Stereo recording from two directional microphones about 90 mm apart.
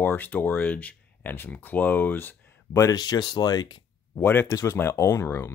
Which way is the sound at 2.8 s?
45° left (ahead or behind).